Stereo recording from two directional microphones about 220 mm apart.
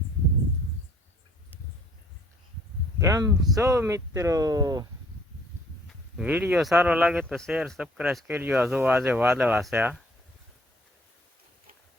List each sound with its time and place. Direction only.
3.0 s speech: 15° right (ahead or behind)
6.1 s speech: 5° right (ahead or behind)